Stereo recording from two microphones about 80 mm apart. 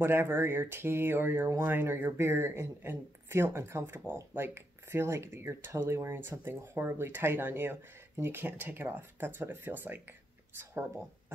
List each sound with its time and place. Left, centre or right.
0.0 s speech: right